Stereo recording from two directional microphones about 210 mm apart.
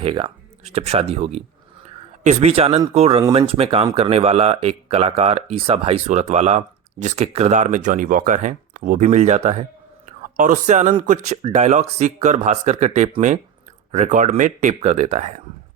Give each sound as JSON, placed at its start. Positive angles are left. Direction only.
{"t": 0.0, "sound": "speech", "side_deg": -25}